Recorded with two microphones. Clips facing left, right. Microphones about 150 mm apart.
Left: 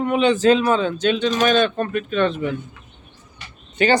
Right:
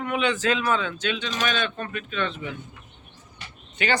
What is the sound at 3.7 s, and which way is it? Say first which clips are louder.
Speech: left 8 dB; 35° left (ahead or behind).